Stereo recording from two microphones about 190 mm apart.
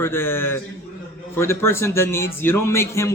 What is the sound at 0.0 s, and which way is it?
A man's voice, 10° left (ahead or behind).